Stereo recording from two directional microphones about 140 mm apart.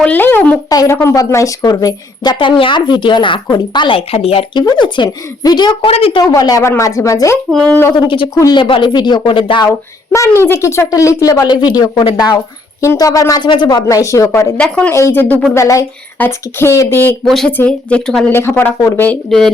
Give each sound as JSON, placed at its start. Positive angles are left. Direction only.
{"t": 0.0, "sound": "speech", "side_deg": 10}
{"t": 0.7, "sound": "a woman's voice", "side_deg": 25}
{"t": 4.6, "sound": "a woman's voice", "side_deg": 30}
{"t": 5.9, "sound": "a woman's voice", "side_deg": 40}
{"t": 6.2, "sound": "speech", "side_deg": 25}
{"t": 7.5, "sound": "speech", "side_deg": 10}
{"t": 7.9, "sound": "a woman's voice", "side_deg": 35}
{"t": 9.6, "sound": "speech", "side_deg": 20}
{"t": 14.6, "sound": "speech", "side_deg": 5}
{"t": 14.9, "sound": "speech", "side_deg": 15}
{"t": 17.2, "sound": "a woman's voice", "side_deg": 0}
{"t": 18.3, "sound": "speech", "side_deg": 15}
{"t": 19.0, "sound": "speech", "side_deg": 5}